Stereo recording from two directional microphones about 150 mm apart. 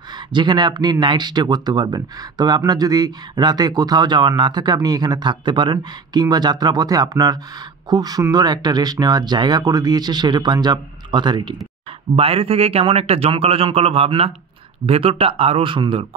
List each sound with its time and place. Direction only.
0.3 s a man's voice: 30° right (ahead or behind)